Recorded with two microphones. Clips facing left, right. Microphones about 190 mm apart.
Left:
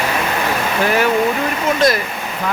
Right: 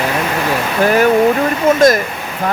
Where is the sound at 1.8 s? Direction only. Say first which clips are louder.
Right 5 dB; 45° right (ahead or behind).